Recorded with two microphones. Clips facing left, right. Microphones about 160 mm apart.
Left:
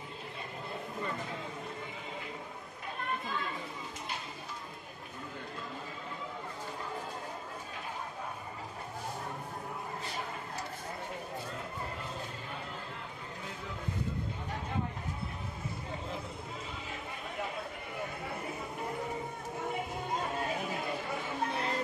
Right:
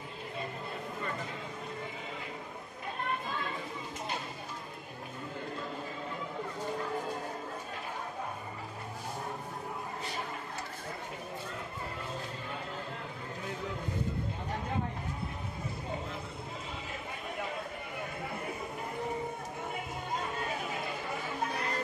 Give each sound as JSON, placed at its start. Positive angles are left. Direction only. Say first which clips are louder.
{"t": 21.5, "sound": "music", "louder": "left 1 dB", "side_deg": 25}